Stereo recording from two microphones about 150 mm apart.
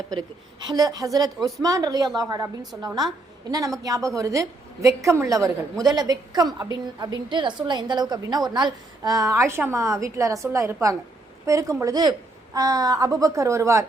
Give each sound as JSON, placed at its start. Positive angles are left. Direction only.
{"t": 0.7, "sound": "a woman's voice", "side_deg": -25}